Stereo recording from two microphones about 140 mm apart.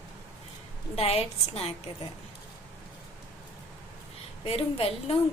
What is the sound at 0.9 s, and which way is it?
Speech, 45° left (ahead or behind).